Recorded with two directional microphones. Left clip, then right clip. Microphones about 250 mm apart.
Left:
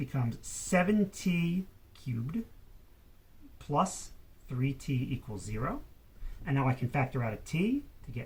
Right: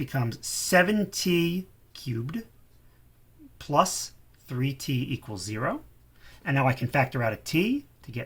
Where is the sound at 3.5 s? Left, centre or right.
Right.